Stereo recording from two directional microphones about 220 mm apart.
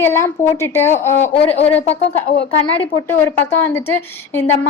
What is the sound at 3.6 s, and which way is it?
Speech, 10° left (ahead or behind).